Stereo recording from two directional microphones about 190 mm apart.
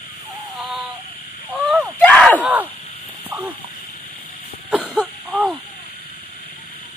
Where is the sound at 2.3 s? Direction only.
10° right (ahead or behind).